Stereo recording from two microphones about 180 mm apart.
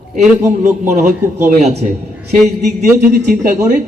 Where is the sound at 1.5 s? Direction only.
40° right (ahead or behind).